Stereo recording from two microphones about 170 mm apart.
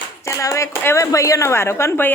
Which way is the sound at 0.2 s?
15° left (ahead or behind).